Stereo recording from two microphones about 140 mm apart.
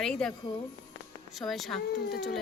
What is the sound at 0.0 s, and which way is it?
Speech, 5° left (ahead or behind).